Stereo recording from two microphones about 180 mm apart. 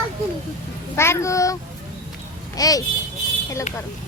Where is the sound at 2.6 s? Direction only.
20° left (ahead or behind).